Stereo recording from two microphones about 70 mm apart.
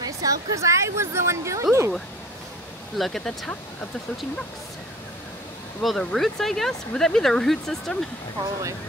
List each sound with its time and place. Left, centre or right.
0.0 s a woman's voice: right
3.0 s speech: centre
5.8 s speech: centre